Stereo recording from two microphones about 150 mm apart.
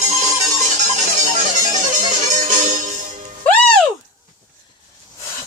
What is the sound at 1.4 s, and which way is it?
Music, 55° right (ahead or behind).